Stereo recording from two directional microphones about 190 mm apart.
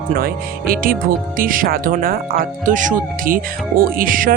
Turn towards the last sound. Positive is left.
turn(degrees=-45)  # may be behind; listen again after turning